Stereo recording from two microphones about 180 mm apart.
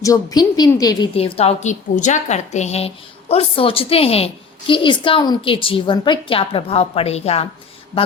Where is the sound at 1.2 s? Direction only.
35° left (ahead or behind).